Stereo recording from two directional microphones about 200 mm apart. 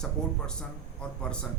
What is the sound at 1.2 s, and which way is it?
Speech, 5° left (ahead or behind).